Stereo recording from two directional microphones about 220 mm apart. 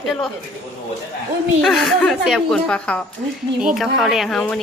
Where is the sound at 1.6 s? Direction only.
Centre (ahead or behind).